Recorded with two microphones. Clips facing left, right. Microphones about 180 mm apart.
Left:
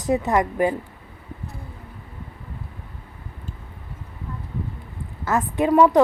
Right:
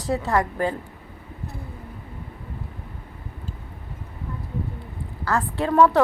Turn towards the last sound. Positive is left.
turn(degrees=15)  # may be behind; listen again after turning